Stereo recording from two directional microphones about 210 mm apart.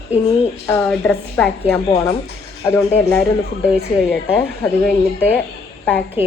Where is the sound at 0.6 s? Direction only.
10° left (ahead or behind).